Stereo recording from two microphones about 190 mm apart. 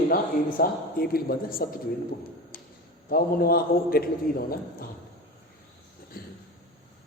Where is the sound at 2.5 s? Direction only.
50° left (ahead or behind).